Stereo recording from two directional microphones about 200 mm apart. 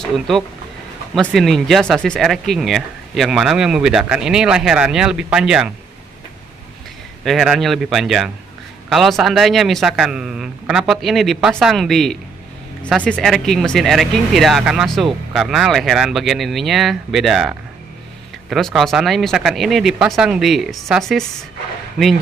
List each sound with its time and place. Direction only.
1.3 s speech: centre (ahead or behind)
7.2 s speech: centre (ahead or behind)